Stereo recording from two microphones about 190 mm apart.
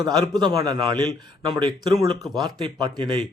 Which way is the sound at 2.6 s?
25° right (ahead or behind).